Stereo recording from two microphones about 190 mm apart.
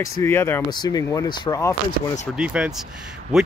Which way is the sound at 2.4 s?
5° right (ahead or behind).